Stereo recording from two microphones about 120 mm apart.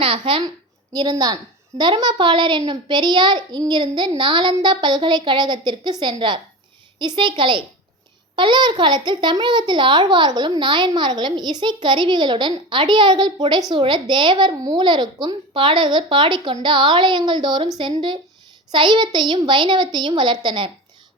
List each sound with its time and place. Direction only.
0.0 s a woman's voice: 50° right (ahead or behind)
0.9 s a child's voice: 35° right (ahead or behind)